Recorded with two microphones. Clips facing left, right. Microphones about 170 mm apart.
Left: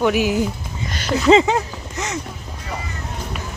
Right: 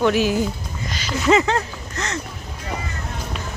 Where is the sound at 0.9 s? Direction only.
60° left (ahead or behind).